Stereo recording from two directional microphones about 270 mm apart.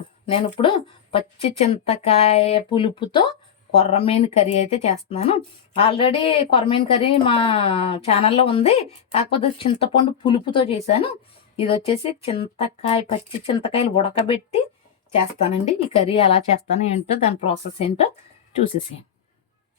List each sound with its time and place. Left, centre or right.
0.3 s speech: centre